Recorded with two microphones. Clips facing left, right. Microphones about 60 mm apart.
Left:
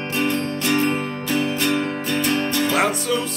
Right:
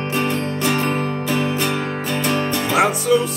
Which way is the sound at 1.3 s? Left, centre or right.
Right.